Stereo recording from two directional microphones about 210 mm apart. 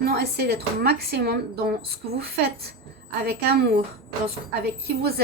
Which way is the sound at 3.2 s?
50° right (ahead or behind).